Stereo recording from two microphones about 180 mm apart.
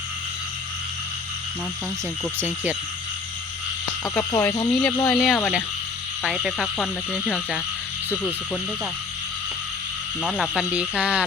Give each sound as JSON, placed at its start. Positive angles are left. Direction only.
{"t": 4.0, "sound": "speech", "side_deg": 20}
{"t": 6.2, "sound": "speech", "side_deg": -5}
{"t": 10.2, "sound": "speech", "side_deg": 0}